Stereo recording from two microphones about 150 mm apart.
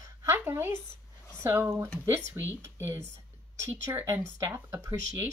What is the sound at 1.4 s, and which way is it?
Speech, 15° right (ahead or behind).